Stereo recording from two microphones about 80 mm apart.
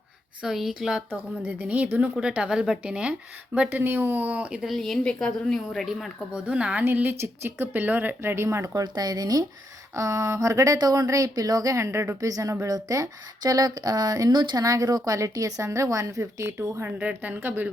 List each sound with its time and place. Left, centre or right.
0.4 s a woman's voice: centre
1.4 s a woman's voice: right
3.7 s speech: right
4.6 s a woman's voice: centre
5.8 s a woman's voice: centre
6.3 s a woman's voice: centre
6.8 s speech: right
8.8 s a woman's voice: right
9.9 s speech: right
10.8 s a woman's voice: right
14.6 s speech: right